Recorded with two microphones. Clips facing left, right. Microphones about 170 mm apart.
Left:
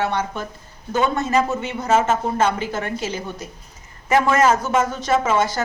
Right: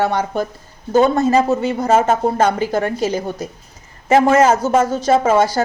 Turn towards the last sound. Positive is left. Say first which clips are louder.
# right 5 dB
turn(degrees=-35)  # may be behind; listen again after turning